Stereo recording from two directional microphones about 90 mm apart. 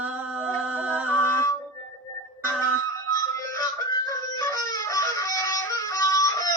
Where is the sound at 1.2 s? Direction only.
30° left (ahead or behind).